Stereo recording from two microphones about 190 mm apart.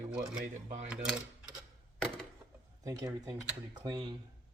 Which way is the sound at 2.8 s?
20° right (ahead or behind).